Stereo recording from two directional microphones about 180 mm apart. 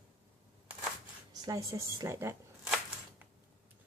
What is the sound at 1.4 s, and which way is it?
A woman's voice, 20° right (ahead or behind).